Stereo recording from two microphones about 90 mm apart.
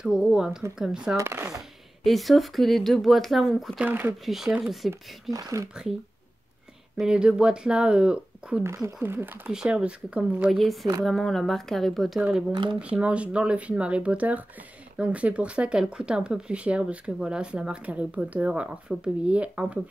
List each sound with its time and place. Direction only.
0.0 s speech: 5° right (ahead or behind)
1.1 s speech: 30° right (ahead or behind)
2.0 s speech: centre (ahead or behind)
3.8 s speech: 20° right (ahead or behind)
4.3 s speech: 5° right (ahead or behind)
5.3 s speech: 40° right (ahead or behind)
7.0 s speech: 10° right (ahead or behind)
8.6 s speech: 30° right (ahead or behind)
9.5 s speech: 5° right (ahead or behind)
10.5 s speech: centre (ahead or behind)
12.7 s speech: 10° right (ahead or behind)